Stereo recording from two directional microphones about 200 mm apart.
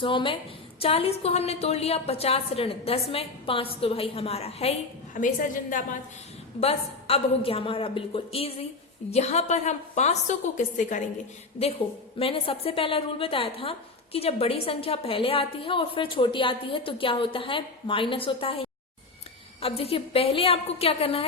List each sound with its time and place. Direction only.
0.0 s a woman's voice: 25° left (ahead or behind)
6.6 s a woman's voice: 30° left (ahead or behind)
12.2 s a woman's voice: 30° left (ahead or behind)